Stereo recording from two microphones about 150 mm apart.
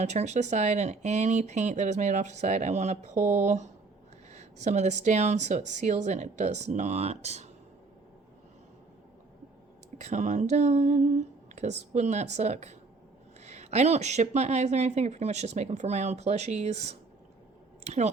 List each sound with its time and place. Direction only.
0.0 s speech: 50° right (ahead or behind)
10.0 s speech: 50° right (ahead or behind)